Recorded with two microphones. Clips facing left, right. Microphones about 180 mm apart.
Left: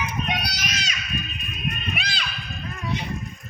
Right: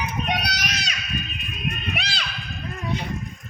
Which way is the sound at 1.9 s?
70° right (ahead or behind).